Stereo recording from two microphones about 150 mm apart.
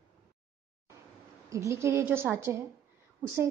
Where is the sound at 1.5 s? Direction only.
20° right (ahead or behind).